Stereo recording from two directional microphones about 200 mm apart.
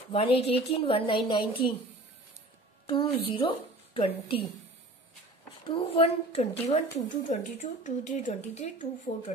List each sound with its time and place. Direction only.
0.1 s a woman's voice: 30° left (ahead or behind)
2.9 s a woman's voice: 25° left (ahead or behind)
5.6 s a woman's voice: 25° left (ahead or behind)